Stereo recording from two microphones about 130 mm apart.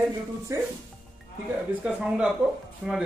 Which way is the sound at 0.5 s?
25° right (ahead or behind).